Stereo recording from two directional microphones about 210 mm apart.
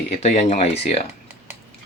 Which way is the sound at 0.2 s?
30° left (ahead or behind).